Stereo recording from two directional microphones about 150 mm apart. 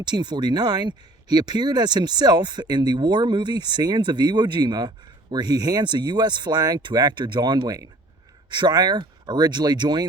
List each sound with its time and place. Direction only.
0.0 s speech: 30° right (ahead or behind)